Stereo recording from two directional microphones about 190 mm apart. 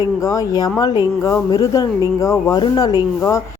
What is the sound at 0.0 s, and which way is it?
A woman's voice, 15° left (ahead or behind).